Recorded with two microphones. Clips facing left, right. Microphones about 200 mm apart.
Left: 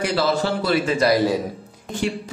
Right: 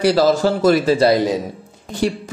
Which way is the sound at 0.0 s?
40° right (ahead or behind).